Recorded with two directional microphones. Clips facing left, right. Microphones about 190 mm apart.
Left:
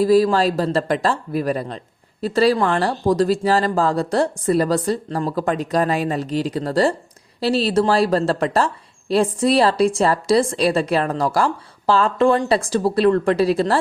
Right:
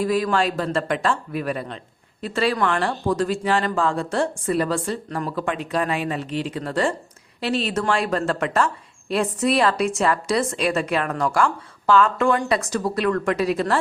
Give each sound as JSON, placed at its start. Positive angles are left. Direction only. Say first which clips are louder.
{"t": 0.0, "sound": "speech", "louder": "left 6 dB", "side_deg": 35}